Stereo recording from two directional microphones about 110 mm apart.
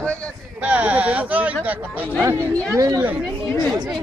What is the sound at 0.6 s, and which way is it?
Speech, 10° right (ahead or behind).